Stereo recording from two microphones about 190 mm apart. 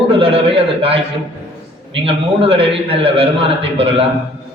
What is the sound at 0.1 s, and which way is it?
Speech, 30° right (ahead or behind).